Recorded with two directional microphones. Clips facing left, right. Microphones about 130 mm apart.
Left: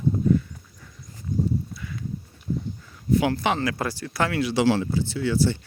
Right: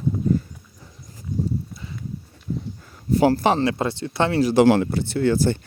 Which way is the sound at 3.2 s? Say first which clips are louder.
Right 9 dB; 35° right (ahead or behind).